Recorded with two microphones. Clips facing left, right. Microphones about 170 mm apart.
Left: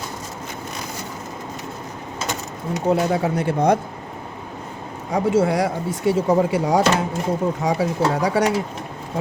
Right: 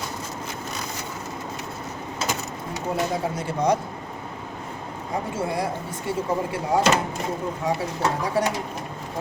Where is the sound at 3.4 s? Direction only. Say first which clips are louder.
Left 4 dB; 60° left (ahead or behind).